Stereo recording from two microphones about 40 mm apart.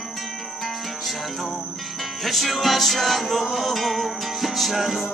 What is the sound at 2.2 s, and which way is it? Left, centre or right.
Music, centre.